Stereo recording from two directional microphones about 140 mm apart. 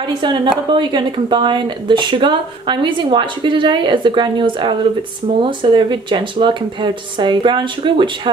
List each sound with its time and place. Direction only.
0.2 s speech: 35° right (ahead or behind)